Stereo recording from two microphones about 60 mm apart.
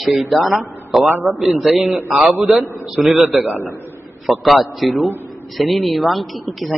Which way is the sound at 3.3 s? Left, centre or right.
Centre.